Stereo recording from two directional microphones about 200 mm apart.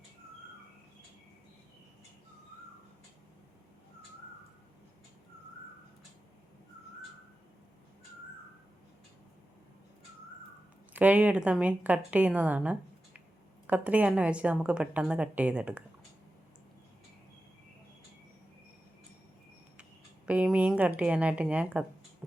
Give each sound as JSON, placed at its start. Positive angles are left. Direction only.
{"t": 10.9, "sound": "a woman's voice", "side_deg": -10}
{"t": 20.2, "sound": "speech", "side_deg": -5}